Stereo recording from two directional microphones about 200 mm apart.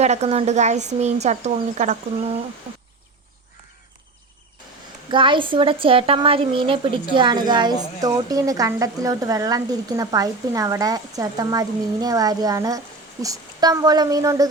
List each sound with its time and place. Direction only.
0.0 s a woman's voice: 35° right (ahead or behind)
5.1 s a woman's voice: 25° right (ahead or behind)